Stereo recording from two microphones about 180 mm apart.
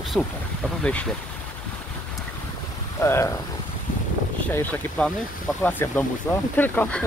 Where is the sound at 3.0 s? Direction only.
15° left (ahead or behind).